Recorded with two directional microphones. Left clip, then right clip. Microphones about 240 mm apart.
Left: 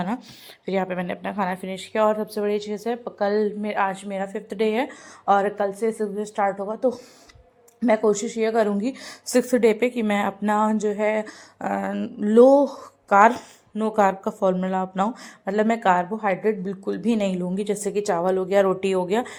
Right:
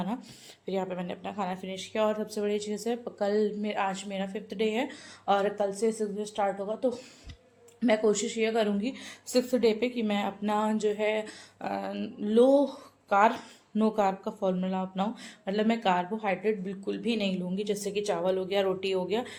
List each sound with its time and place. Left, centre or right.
0.6 s a woman's voice: left